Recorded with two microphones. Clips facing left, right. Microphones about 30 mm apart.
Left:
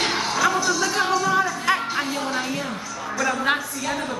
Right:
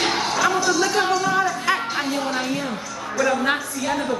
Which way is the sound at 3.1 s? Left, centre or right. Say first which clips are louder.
Right 2 dB; centre.